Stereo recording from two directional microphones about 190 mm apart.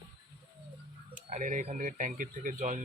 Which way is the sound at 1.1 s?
40° right (ahead or behind).